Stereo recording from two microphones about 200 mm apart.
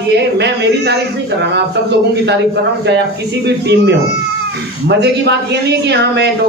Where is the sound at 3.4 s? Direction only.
55° right (ahead or behind).